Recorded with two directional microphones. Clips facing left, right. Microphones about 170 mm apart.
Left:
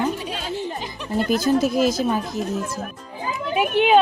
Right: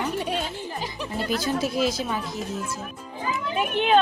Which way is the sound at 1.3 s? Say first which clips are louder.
Left 7 dB; 45° left (ahead or behind).